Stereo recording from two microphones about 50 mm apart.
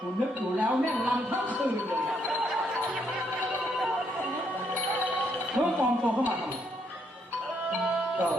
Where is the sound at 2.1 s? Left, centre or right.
Centre.